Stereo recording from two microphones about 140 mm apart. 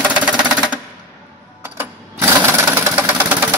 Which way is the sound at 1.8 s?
15° right (ahead or behind).